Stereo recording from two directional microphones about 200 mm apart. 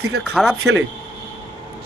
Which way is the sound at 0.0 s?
90° right.